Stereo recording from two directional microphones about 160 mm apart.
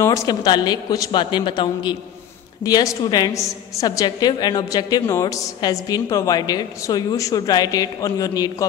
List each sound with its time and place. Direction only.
0.0 s a woman's voice: 20° left (ahead or behind)